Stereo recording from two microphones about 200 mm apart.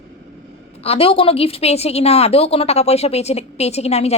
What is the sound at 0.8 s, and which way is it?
A woman's voice, 30° left (ahead or behind).